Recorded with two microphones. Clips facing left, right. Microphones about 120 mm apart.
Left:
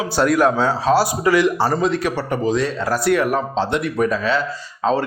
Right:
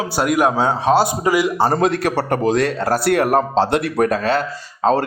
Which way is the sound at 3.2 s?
40° right (ahead or behind).